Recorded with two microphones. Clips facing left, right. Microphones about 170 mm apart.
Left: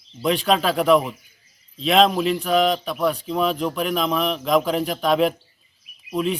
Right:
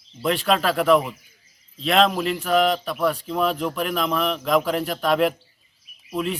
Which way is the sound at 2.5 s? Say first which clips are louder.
Even; 5° right (ahead or behind).